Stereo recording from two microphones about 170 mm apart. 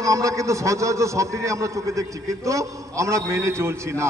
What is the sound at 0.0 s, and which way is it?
A man's voice, 20° right (ahead or behind).